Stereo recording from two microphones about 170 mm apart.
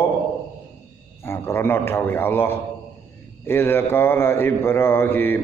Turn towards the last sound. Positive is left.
turn(degrees=15)  # may be behind; listen again after turning